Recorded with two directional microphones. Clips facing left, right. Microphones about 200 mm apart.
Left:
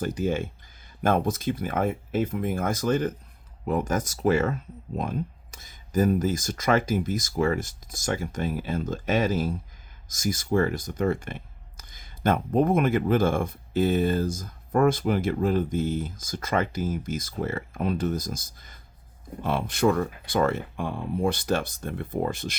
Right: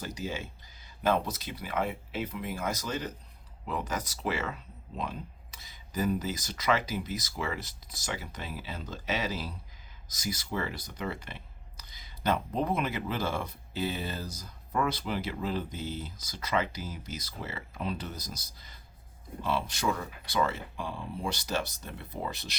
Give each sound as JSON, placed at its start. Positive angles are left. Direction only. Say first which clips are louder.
{"t": 0.0, "sound": "speech", "louder": "left 10 dB", "side_deg": 50}